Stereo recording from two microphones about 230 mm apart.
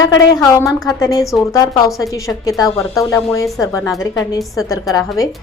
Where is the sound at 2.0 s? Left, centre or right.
Centre.